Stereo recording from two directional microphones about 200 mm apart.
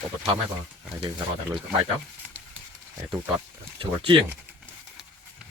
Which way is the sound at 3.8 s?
25° right (ahead or behind).